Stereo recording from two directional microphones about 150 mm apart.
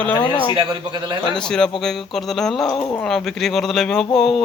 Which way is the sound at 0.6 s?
30° right (ahead or behind).